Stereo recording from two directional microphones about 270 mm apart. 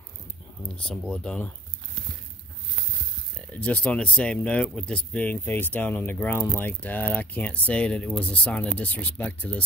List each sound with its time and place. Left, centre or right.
0.7 s speech: centre
3.3 s speech: centre